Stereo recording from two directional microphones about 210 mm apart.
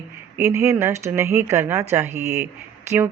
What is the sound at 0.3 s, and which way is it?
Speech, 15° right (ahead or behind).